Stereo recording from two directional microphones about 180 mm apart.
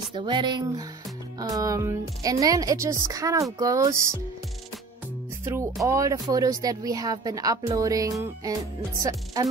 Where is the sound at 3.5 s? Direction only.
20° right (ahead or behind).